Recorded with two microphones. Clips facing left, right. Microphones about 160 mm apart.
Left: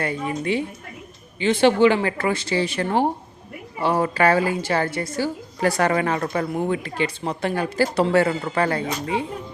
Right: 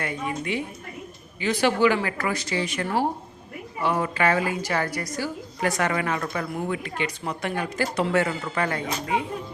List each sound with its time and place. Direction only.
0.0 s a woman's voice: 35° left (ahead or behind)